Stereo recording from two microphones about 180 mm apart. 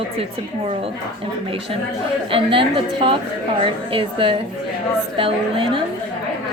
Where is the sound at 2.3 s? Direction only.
30° right (ahead or behind).